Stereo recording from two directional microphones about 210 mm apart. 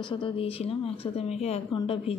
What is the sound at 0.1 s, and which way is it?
A woman's voice, 25° left (ahead or behind).